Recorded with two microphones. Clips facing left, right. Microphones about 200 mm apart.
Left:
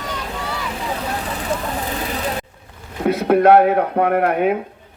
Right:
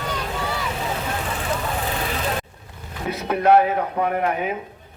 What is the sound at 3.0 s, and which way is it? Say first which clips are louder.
Speech: left 7 dB; 60° left (ahead or behind).